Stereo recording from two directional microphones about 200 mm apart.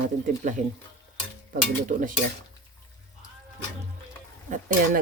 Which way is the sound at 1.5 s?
45° right (ahead or behind).